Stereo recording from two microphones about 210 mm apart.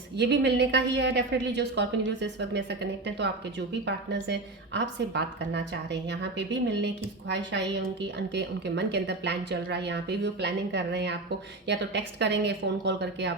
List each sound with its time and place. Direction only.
0.2 s a woman's voice: 55° right (ahead or behind)